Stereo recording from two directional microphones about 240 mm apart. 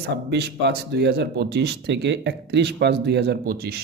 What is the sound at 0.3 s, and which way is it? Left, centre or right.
Speech, right.